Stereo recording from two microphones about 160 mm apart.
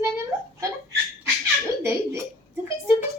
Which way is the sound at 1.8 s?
15° right (ahead or behind).